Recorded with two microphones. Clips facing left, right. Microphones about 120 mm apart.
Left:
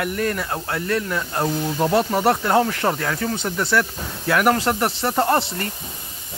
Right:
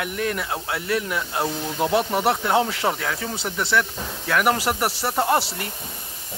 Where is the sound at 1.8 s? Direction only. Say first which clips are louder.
Left 2 dB; 5° right (ahead or behind).